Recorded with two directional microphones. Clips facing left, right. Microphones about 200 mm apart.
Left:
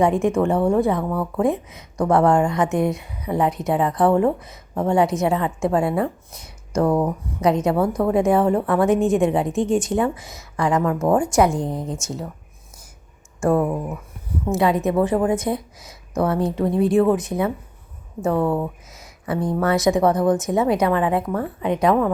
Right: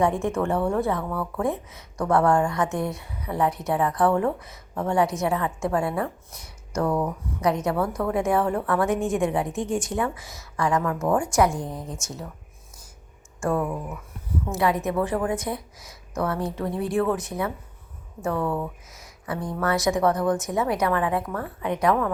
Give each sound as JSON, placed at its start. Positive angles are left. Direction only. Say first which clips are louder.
{"t": 0.0, "sound": "a woman's voice", "louder": "left 5 dB", "side_deg": 15}
{"t": 13.4, "sound": "speech", "louder": "left 6 dB", "side_deg": 35}
{"t": 14.4, "sound": "a woman's voice", "louder": "left 5 dB", "side_deg": 20}